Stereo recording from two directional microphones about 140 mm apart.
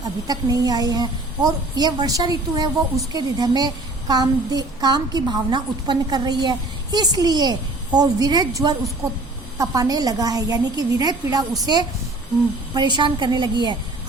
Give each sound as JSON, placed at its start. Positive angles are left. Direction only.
{"t": 0.0, "sound": "a woman's voice", "side_deg": -30}